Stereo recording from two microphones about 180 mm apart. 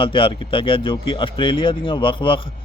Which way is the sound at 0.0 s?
30° left (ahead or behind).